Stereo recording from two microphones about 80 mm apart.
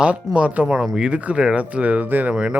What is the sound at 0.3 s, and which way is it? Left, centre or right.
Speech, centre.